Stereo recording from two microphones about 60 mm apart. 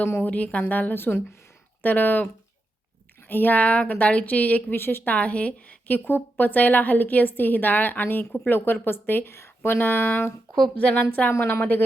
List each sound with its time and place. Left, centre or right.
0.0 s a woman's voice: left
4.7 s a woman's voice: left
5.1 s a woman's voice: left
6.1 s a woman's voice: left
9.3 s speech: left
9.8 s a woman's voice: left
10.8 s a woman's voice: left
11.3 s a woman's voice: left